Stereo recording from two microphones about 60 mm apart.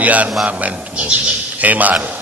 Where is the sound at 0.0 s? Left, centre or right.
Right.